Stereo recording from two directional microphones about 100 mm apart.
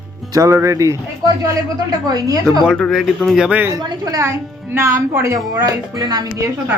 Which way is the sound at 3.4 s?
10° right (ahead or behind).